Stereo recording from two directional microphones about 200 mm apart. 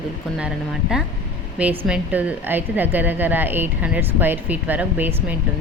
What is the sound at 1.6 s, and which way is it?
A woman's voice, 5° right (ahead or behind).